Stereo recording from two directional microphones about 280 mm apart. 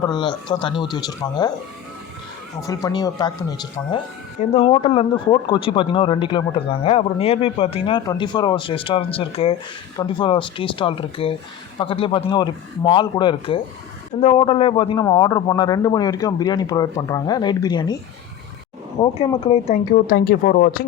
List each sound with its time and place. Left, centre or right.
0.0 s a man's voice: centre
2.6 s a man's voice: centre
19.0 s a man's voice: centre